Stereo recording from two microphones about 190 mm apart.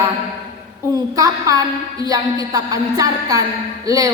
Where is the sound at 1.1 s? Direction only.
20° right (ahead or behind).